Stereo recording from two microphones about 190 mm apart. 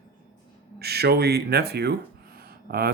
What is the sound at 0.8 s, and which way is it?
Speech, 55° right (ahead or behind).